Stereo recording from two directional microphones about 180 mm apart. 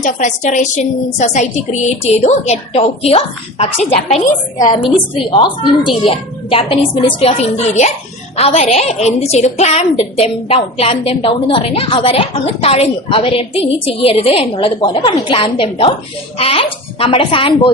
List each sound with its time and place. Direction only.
0.0 s a woman's voice: 40° left (ahead or behind)
4.7 s a woman's voice: 25° left (ahead or behind)